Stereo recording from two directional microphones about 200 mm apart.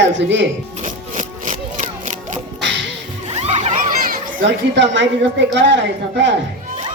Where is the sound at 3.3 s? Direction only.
30° right (ahead or behind).